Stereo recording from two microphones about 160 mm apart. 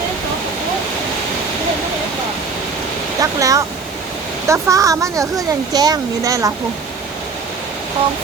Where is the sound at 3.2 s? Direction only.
20° right (ahead or behind).